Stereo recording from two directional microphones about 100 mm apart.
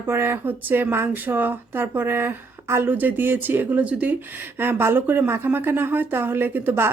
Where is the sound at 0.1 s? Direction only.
20° right (ahead or behind).